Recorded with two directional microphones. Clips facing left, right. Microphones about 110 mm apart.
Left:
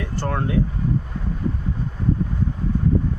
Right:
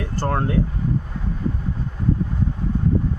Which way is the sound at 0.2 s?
35° right (ahead or behind).